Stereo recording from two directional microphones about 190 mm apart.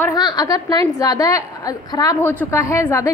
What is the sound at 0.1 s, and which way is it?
A woman's voice, 20° left (ahead or behind).